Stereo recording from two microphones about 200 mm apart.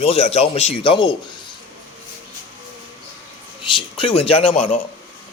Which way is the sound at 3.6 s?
25° left (ahead or behind).